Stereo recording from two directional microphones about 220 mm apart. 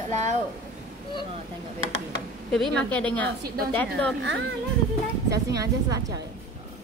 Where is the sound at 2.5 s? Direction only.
5° left (ahead or behind).